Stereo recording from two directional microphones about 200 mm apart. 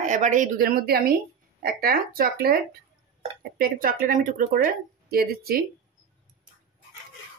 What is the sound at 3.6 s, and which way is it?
Speech, 45° right (ahead or behind).